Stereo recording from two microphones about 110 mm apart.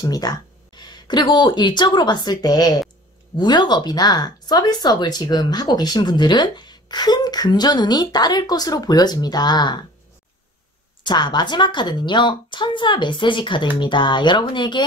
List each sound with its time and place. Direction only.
0.0 s speech: 35° left (ahead or behind)
11.1 s a woman's voice: 45° left (ahead or behind)